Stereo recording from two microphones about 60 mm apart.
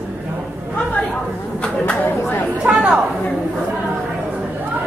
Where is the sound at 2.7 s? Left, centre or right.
Right.